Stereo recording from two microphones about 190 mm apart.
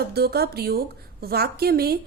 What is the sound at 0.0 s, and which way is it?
A woman's voice, 55° right (ahead or behind).